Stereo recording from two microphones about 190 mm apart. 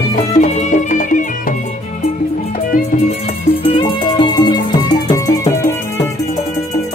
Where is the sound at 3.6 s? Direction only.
25° left (ahead or behind).